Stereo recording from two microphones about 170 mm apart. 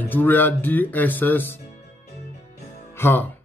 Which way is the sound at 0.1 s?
10° left (ahead or behind).